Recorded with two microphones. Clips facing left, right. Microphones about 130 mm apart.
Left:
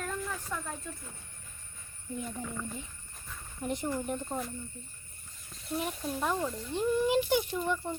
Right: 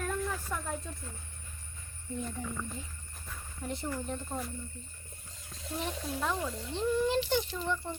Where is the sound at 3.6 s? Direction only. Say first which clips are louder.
Left 4 dB; 15° left (ahead or behind).